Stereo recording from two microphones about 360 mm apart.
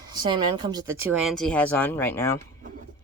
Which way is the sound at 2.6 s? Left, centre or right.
Right.